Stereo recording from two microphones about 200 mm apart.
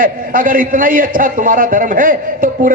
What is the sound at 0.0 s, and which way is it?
A man's voice, 45° right (ahead or behind).